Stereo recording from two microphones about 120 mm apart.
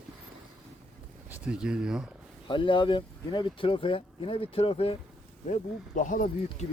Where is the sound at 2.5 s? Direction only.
45° left (ahead or behind).